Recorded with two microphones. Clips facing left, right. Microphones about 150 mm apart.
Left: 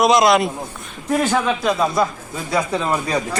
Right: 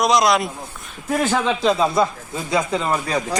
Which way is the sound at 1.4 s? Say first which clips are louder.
Right 1 dB; 25° right (ahead or behind).